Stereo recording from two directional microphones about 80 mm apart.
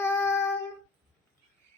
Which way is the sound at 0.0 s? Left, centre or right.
Left.